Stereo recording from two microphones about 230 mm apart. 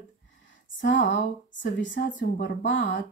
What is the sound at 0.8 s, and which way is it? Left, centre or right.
Speech, left.